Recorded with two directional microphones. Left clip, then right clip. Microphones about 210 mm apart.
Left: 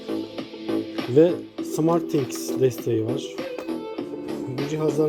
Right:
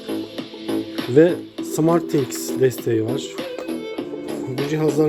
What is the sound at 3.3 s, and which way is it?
Music, 25° right (ahead or behind).